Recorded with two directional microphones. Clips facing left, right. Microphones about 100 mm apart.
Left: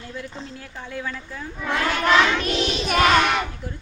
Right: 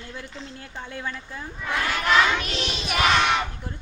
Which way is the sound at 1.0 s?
20° right (ahead or behind).